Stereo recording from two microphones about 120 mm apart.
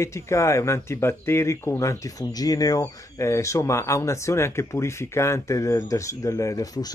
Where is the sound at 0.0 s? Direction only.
25° left (ahead or behind).